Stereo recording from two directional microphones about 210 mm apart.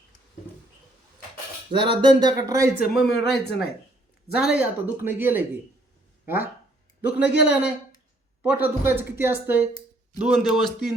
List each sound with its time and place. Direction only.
1.8 s speech: 20° right (ahead or behind)
2.9 s speech: centre (ahead or behind)